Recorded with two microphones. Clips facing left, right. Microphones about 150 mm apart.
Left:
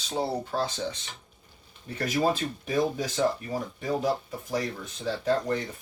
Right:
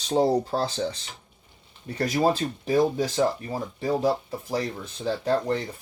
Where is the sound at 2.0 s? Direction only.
30° right (ahead or behind).